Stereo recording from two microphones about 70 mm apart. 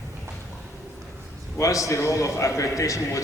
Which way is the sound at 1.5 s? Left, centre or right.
Left.